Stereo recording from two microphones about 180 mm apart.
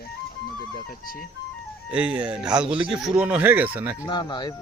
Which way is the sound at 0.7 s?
50° left (ahead or behind).